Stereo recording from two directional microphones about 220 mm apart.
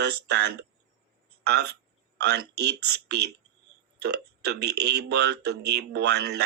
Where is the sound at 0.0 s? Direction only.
50° right (ahead or behind).